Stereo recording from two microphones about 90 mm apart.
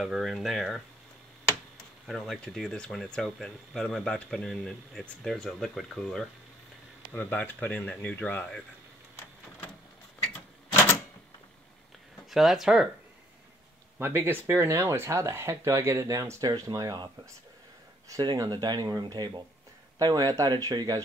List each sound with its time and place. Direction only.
0.0 s speech: 5° right (ahead or behind)
2.0 s speech: centre (ahead or behind)
7.1 s speech: 20° left (ahead or behind)
12.3 s speech: centre (ahead or behind)
13.9 s speech: 25° right (ahead or behind); by 17.1 s 50° right (ahead or behind)
18.2 s speech: 55° right (ahead or behind)